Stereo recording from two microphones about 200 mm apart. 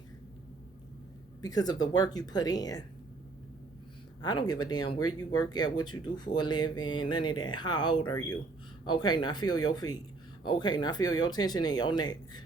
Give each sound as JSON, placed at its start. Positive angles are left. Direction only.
{"t": 1.4, "sound": "speech", "side_deg": 20}
{"t": 4.2, "sound": "speech", "side_deg": 20}